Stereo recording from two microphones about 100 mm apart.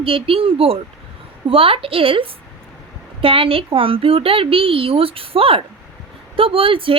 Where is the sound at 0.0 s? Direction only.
65° right (ahead or behind).